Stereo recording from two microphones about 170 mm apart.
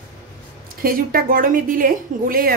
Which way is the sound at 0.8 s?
60° right (ahead or behind).